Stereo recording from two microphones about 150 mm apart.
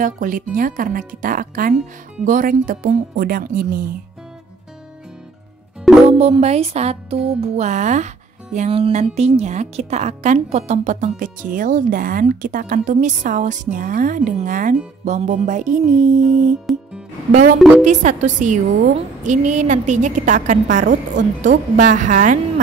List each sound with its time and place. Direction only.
0.0 s a woman's voice: 65° right (ahead or behind)
6.0 s speech: 45° right (ahead or behind)
8.5 s a woman's voice: 40° right (ahead or behind)
16.2 s music: 5° right (ahead or behind)
17.8 s a woman's voice: 55° right (ahead or behind)